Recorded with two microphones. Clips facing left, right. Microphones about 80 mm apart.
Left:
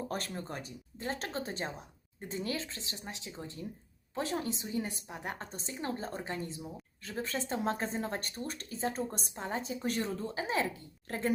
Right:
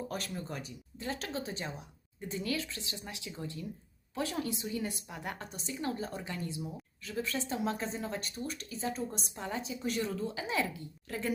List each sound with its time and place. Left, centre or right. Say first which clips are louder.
0.1 s a woman's voice: left 1 dB; left